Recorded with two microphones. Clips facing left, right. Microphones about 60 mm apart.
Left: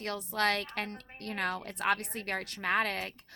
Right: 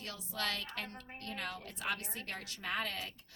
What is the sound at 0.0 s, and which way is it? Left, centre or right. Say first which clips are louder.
A woman's voice: left 9 dB; left.